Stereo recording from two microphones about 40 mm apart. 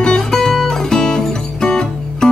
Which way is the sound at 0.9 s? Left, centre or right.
Centre.